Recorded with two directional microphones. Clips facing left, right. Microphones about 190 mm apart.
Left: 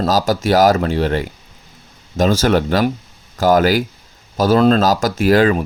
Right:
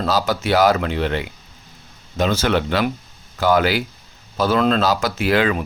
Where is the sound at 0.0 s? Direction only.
40° left (ahead or behind).